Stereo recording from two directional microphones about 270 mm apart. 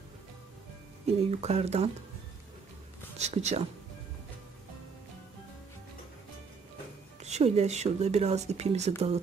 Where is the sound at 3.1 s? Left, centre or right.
Right.